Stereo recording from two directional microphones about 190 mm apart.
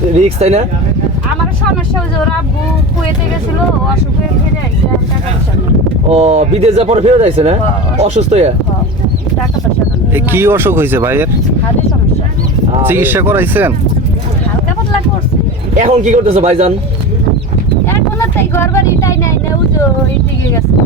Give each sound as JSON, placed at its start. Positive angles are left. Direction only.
{"t": 0.3, "sound": "speech", "side_deg": -35}
{"t": 6.1, "sound": "speech", "side_deg": -35}
{"t": 10.2, "sound": "speech", "side_deg": -10}
{"t": 12.8, "sound": "speech", "side_deg": -10}
{"t": 15.7, "sound": "speech", "side_deg": -40}
{"t": 17.8, "sound": "a sound", "side_deg": 15}